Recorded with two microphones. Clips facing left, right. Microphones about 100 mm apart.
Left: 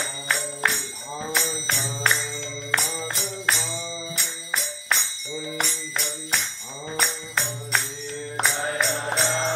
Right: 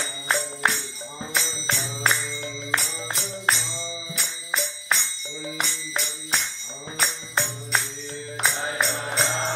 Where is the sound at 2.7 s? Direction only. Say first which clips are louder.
Left 2 dB; centre (ahead or behind).